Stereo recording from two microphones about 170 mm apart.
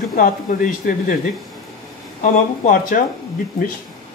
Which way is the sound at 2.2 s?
50° left (ahead or behind).